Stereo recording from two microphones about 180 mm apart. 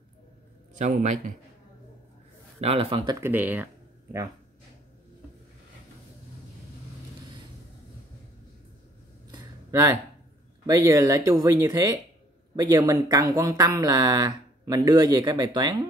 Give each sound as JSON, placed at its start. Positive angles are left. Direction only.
{"t": 0.7, "sound": "a man's voice", "side_deg": -45}
{"t": 2.6, "sound": "speech", "side_deg": -30}
{"t": 3.2, "sound": "speech", "side_deg": -10}
{"t": 9.3, "sound": "a sound", "side_deg": -20}
{"t": 10.7, "sound": "speech", "side_deg": -20}